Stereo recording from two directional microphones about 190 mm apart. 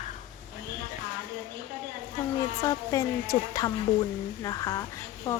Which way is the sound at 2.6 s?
20° left (ahead or behind).